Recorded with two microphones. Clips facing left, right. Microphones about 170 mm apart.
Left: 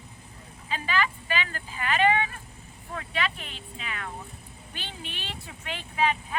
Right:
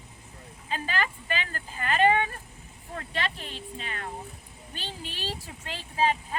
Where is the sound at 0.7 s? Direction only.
40° right (ahead or behind).